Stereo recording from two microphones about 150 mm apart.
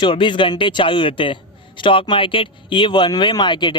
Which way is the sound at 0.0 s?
35° left (ahead or behind).